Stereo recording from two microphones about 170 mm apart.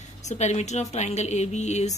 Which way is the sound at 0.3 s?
40° left (ahead or behind).